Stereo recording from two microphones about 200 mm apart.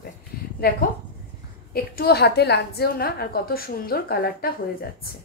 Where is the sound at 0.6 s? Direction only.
50° left (ahead or behind).